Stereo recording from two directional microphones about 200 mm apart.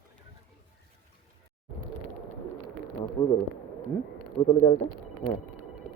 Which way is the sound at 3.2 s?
20° left (ahead or behind).